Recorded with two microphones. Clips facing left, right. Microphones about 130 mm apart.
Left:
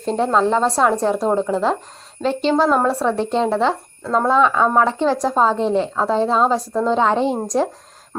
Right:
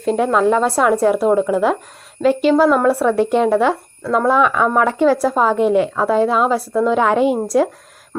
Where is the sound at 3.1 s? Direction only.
10° right (ahead or behind).